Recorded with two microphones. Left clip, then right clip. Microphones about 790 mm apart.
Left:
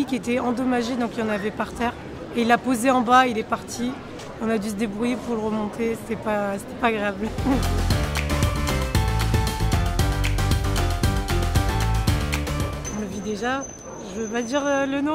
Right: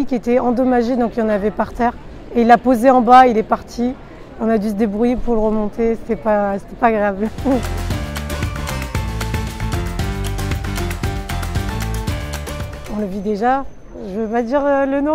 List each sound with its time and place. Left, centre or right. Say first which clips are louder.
0.0 s speech: right 8 dB; right
8.1 s music: even; centre
13.3 s speech: right 10 dB; right
14.3 s speech: right 7 dB; right